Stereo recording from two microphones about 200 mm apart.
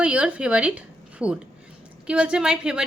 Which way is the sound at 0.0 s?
5° right (ahead or behind).